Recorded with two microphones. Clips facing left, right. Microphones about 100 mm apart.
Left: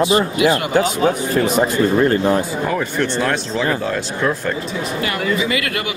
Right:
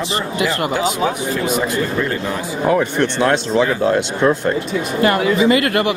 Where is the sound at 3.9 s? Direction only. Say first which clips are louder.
Right 5 dB; 30° right (ahead or behind).